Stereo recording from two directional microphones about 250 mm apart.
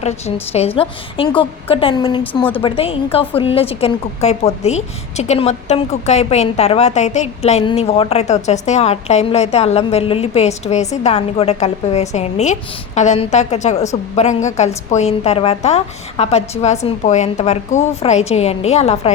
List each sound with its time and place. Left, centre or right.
0.0 s a woman's voice: left
2.2 s speech: centre
2.6 s a woman's voice: left